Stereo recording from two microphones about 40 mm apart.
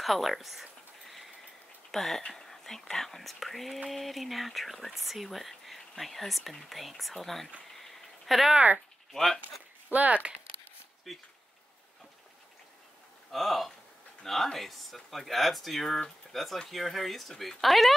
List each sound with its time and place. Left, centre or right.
0.0 s a sound: centre
1.9 s speech: centre
7.8 s a sound: centre
9.1 s speech: centre
9.9 s speech: right
11.1 s speech: centre
13.3 s speech: centre